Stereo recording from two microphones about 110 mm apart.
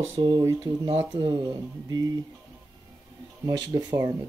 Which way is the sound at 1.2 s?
35° right (ahead or behind).